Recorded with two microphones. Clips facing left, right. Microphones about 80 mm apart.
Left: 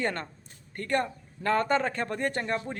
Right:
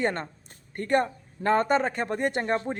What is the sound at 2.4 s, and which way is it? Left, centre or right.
Speech, right.